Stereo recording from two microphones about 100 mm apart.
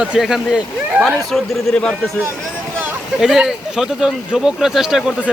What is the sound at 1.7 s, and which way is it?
Speech, 10° left (ahead or behind).